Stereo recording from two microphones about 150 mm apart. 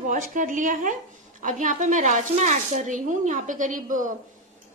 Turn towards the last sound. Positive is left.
turn(degrees=-60)  # may be behind; listen again after turning